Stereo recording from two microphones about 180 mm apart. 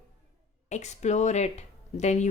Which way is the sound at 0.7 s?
40° left (ahead or behind).